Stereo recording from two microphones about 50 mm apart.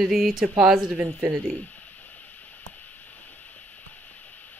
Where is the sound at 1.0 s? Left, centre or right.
Right.